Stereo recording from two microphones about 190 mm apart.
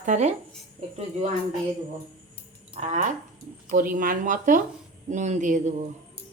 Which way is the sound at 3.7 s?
45° right (ahead or behind).